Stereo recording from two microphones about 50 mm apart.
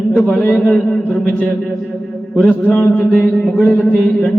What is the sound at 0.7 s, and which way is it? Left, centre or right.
Speech, left.